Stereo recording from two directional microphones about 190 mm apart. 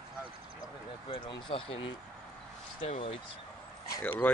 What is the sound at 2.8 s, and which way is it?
Speech, 35° left (ahead or behind).